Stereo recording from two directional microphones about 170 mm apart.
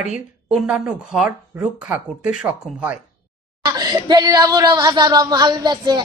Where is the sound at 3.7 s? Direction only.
25° right (ahead or behind).